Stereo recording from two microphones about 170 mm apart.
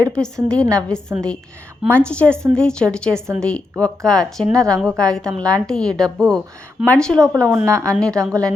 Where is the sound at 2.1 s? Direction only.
5° left (ahead or behind).